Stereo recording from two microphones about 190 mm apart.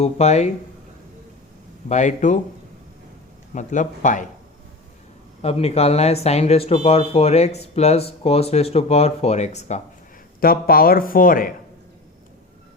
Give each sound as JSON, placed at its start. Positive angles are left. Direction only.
{"t": 0.0, "sound": "speech", "side_deg": 35}
{"t": 1.9, "sound": "speech", "side_deg": 40}
{"t": 3.5, "sound": "speech", "side_deg": 40}
{"t": 5.4, "sound": "speech", "side_deg": 30}
{"t": 10.4, "sound": "speech", "side_deg": 50}